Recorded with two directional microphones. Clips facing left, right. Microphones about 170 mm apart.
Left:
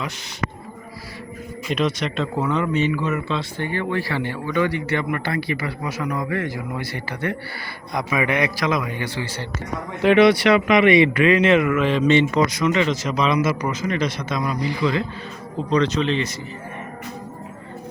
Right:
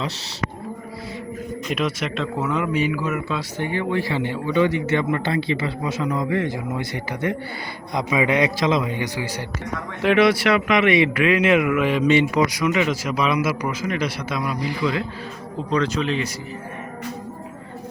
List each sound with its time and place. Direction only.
1.6 s a man's voice: 5° right (ahead or behind)
10.0 s speech: centre (ahead or behind)